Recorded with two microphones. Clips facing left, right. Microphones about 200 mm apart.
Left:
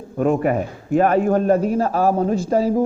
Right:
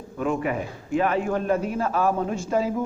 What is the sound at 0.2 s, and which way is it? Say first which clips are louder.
A woman's voice: left 7 dB; 45° left (ahead or behind).